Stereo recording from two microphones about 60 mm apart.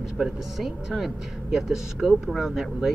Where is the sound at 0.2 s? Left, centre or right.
Centre.